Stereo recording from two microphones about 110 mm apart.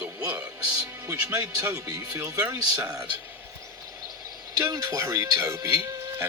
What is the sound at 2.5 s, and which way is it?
Speech, 30° right (ahead or behind).